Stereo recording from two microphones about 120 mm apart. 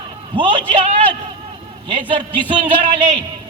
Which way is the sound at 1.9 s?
45° right (ahead or behind).